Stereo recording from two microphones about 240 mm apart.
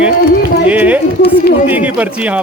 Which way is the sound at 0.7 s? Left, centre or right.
Centre.